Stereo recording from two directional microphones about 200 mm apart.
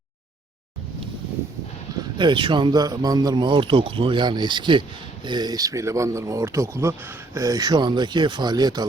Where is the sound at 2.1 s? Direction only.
25° right (ahead or behind).